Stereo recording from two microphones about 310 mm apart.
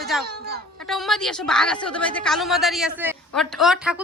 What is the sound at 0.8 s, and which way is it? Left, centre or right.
A woman's voice, centre.